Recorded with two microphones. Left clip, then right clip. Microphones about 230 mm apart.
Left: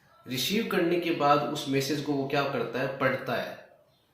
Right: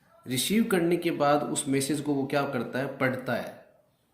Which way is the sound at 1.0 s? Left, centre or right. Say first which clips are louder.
Left 1 dB; right.